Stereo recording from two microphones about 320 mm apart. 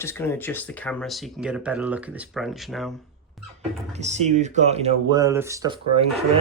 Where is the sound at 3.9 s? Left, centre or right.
Right.